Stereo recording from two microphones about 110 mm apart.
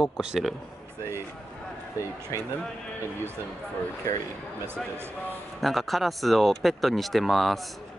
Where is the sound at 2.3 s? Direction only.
30° left (ahead or behind).